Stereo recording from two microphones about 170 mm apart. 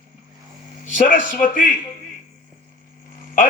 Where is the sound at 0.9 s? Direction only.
50° left (ahead or behind).